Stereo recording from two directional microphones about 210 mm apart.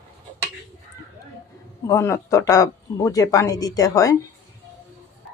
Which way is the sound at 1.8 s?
15° left (ahead or behind).